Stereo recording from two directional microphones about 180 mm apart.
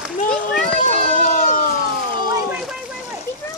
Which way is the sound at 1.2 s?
45° left (ahead or behind).